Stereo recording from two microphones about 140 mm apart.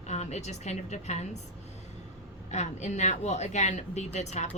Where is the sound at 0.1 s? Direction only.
55° left (ahead or behind).